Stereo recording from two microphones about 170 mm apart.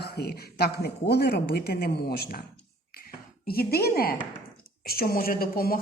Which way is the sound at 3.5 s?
65° left (ahead or behind).